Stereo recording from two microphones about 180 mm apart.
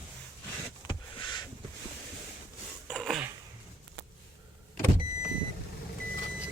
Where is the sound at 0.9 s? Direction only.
25° left (ahead or behind).